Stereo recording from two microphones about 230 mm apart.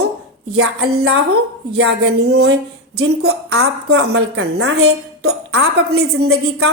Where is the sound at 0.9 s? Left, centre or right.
Right.